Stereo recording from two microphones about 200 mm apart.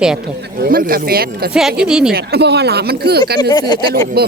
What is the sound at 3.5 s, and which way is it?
Speech, 20° left (ahead or behind).